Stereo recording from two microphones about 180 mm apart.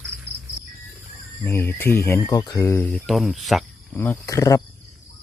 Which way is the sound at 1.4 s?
15° left (ahead or behind).